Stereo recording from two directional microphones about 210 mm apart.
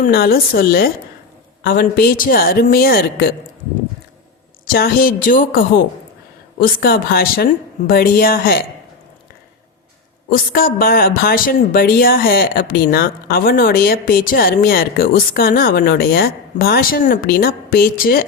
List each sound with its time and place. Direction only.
0.1 s speech: 45° left (ahead or behind)
4.6 s speech: 45° left (ahead or behind)
10.2 s speech: 45° left (ahead or behind)